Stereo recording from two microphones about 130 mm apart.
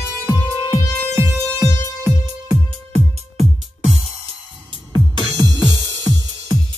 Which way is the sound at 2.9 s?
55° right (ahead or behind).